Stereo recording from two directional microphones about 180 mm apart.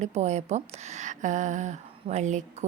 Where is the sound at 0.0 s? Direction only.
40° right (ahead or behind).